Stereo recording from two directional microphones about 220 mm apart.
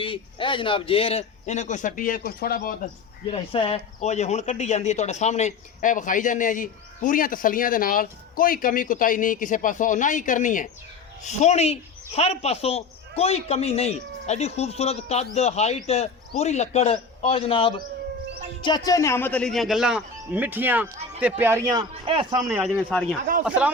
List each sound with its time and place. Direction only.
0.0 s speech: 20° left (ahead or behind); by 2.7 s 40° left (ahead or behind)
3.2 s a man's voice: 25° left (ahead or behind); by 22.6 s 15° right (ahead or behind)
22.6 s speech: centre (ahead or behind)